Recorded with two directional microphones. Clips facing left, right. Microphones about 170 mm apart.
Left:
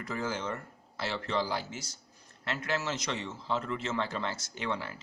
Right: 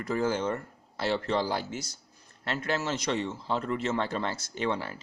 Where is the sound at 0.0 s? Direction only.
45° right (ahead or behind).